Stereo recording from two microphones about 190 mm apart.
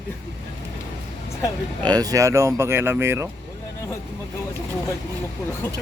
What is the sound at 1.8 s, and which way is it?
Speech, 20° right (ahead or behind).